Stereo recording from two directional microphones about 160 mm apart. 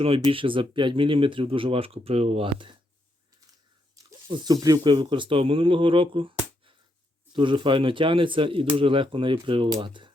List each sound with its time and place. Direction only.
0.0 s speech: 35° right (ahead or behind)
3.9 s speech: 25° right (ahead or behind)